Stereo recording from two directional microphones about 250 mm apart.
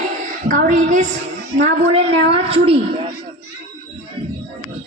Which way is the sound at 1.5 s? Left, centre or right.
Right.